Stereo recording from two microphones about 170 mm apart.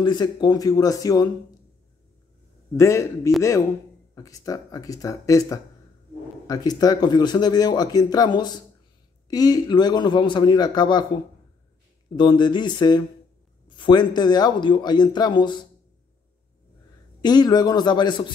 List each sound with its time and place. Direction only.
0.0 s speech: 25° left (ahead or behind)
2.7 s a man's voice: 15° left (ahead or behind)
4.1 s speech: 20° left (ahead or behind)
12.2 s speech: 25° left (ahead or behind)
17.2 s speech: 25° left (ahead or behind)